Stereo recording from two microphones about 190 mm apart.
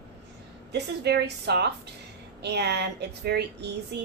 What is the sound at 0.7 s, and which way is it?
A woman's voice, 60° right (ahead or behind).